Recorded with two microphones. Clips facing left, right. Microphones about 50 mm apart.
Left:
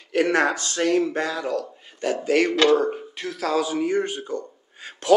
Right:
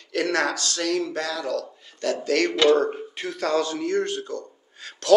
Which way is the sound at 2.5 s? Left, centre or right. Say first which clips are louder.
Even; centre.